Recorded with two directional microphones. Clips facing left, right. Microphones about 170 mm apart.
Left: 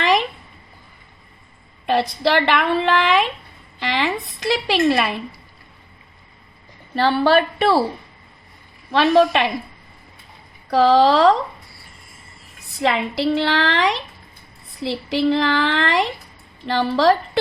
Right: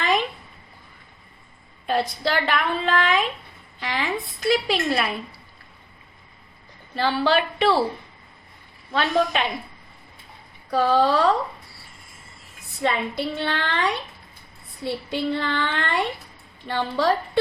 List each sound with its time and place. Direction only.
0.0 s a sound: 80° left
1.9 s a woman's voice: 85° left
7.1 s a woman's voice: 55° left (ahead or behind)
8.9 s a woman's voice: 85° left
10.7 s a woman's voice: 85° left
12.8 s a woman's voice: 90° left